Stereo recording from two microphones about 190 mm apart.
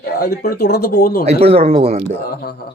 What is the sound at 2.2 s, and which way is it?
Speech, 55° left (ahead or behind).